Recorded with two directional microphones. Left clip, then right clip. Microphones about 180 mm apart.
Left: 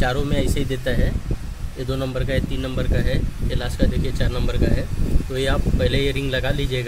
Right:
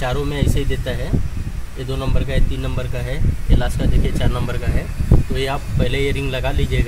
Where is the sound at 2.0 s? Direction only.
20° left (ahead or behind).